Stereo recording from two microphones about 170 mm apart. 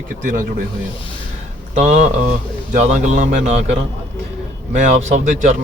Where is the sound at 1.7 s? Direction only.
40° right (ahead or behind).